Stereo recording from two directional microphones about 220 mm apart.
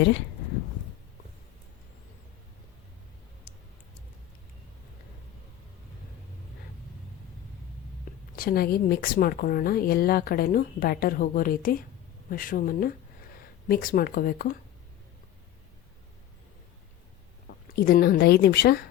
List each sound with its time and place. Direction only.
8.4 s speech: 45° left (ahead or behind)
17.7 s speech: 40° left (ahead or behind)